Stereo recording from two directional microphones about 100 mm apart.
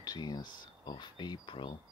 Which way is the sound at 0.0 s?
40° left (ahead or behind).